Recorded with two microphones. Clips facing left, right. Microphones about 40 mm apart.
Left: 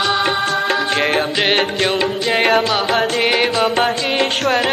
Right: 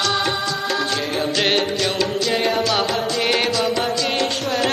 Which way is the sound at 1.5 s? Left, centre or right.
Left.